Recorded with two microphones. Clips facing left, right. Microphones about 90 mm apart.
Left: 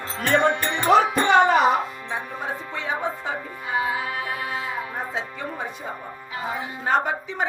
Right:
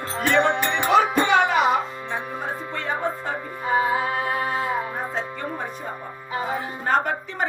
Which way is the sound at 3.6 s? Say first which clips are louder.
Right 5 dB; 40° right (ahead or behind).